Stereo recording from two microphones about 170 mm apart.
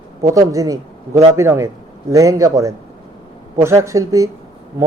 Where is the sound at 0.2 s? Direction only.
20° right (ahead or behind).